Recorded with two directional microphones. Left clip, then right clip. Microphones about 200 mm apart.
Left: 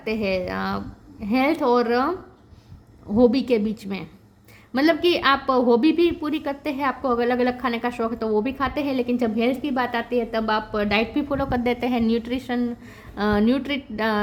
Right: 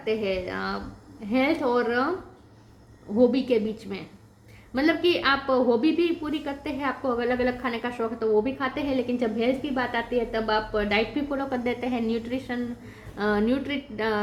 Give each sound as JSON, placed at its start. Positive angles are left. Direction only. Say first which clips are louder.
{"t": 0.0, "sound": "a woman's voice", "louder": "left 2 dB", "side_deg": 50}
{"t": 3.2, "sound": "a woman's voice", "louder": "left 3 dB", "side_deg": 50}